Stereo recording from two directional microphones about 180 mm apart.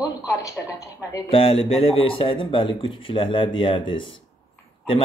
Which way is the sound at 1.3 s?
30° left (ahead or behind).